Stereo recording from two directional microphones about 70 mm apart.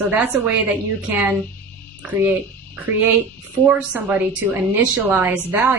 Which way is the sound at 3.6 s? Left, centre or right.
Centre.